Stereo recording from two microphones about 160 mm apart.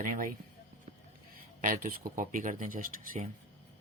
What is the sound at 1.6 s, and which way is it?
Speech, 60° right (ahead or behind).